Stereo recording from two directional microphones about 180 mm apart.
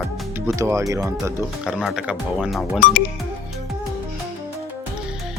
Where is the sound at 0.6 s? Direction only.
15° right (ahead or behind).